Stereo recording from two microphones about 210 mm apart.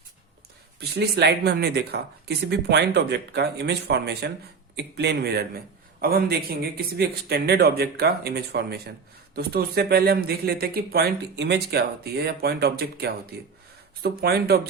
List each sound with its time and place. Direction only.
0.8 s a man's voice: 50° right (ahead or behind)